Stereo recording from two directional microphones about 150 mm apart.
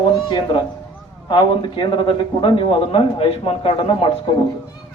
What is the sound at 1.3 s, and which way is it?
A man's voice, 30° left (ahead or behind).